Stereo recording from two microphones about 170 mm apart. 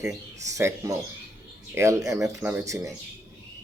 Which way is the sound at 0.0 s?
20° right (ahead or behind).